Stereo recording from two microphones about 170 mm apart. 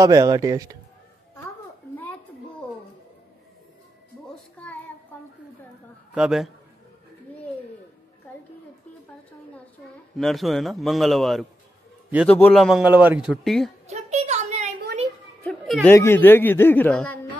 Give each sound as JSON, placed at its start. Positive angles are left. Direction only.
{"t": 0.0, "sound": "speech", "side_deg": -20}
{"t": 4.6, "sound": "child singing", "side_deg": 10}
{"t": 6.1, "sound": "a man's voice", "side_deg": 0}
{"t": 10.1, "sound": "a man's voice", "side_deg": 0}
{"t": 12.6, "sound": "speech", "side_deg": -5}
{"t": 13.8, "sound": "a sound", "side_deg": -40}
{"t": 15.4, "sound": "a sound", "side_deg": 0}
{"t": 15.9, "sound": "a man's voice", "side_deg": 15}